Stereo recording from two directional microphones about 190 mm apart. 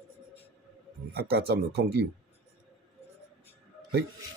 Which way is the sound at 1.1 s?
55° right (ahead or behind).